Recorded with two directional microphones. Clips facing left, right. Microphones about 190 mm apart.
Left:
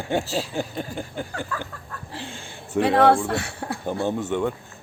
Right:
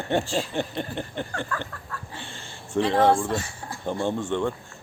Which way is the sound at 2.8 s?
65° left (ahead or behind).